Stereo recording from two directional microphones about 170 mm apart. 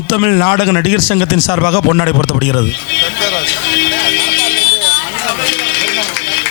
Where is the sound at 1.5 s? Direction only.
25° left (ahead or behind).